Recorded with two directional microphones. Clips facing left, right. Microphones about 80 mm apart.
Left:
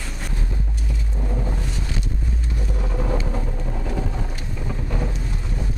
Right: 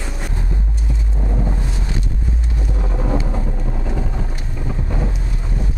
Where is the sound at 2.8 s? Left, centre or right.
Centre.